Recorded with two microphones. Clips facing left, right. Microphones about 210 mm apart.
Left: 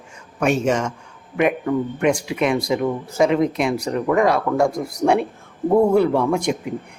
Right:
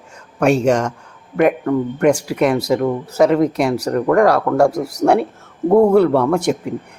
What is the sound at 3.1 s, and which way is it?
Speech, 65° right (ahead or behind).